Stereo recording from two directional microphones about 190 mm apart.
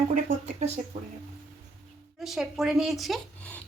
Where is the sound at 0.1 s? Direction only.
40° right (ahead or behind).